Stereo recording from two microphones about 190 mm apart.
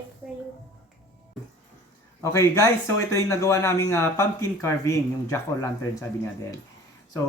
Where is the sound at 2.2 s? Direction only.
15° left (ahead or behind).